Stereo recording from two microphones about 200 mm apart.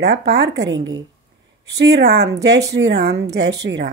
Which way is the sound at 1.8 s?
55° right (ahead or behind).